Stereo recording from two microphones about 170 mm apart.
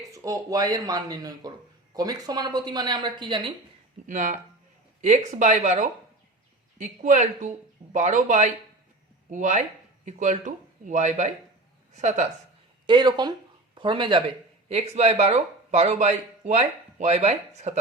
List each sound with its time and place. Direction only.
0.1 s speech: 20° right (ahead or behind)
4.0 s speech: 50° right (ahead or behind)
12.8 s speech: 25° right (ahead or behind)